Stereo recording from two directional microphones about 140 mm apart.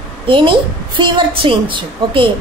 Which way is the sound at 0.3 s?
35° right (ahead or behind).